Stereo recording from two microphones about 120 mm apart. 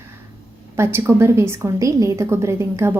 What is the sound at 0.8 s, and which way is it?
A woman's voice, 20° right (ahead or behind).